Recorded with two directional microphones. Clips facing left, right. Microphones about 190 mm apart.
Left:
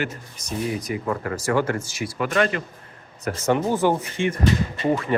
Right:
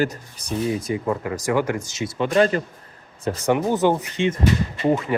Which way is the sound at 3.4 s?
15° right (ahead or behind).